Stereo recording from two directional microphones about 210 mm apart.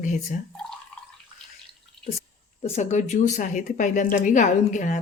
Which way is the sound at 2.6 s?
30° left (ahead or behind).